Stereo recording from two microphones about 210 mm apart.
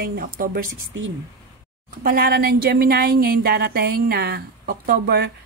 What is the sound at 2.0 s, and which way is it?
A woman's voice, 45° right (ahead or behind).